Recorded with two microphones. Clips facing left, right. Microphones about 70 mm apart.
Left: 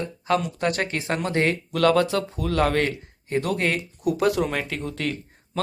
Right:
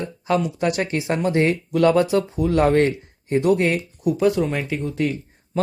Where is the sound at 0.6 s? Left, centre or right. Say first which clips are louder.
Right 3 dB; left.